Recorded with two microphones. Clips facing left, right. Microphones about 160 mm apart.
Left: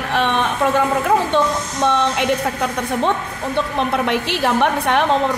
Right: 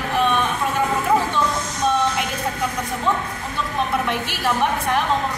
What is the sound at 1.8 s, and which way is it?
Speech, 75° left (ahead or behind).